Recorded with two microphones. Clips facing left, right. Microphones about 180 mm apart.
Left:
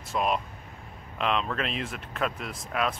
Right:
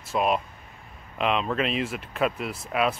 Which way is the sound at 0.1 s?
5° right (ahead or behind).